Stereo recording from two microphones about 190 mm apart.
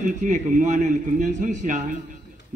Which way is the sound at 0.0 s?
45° right (ahead or behind).